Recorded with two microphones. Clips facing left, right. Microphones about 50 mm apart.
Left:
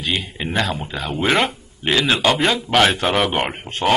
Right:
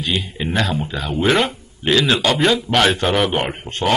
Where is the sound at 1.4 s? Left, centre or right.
Centre.